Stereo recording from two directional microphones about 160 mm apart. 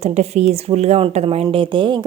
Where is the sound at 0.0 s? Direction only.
40° right (ahead or behind).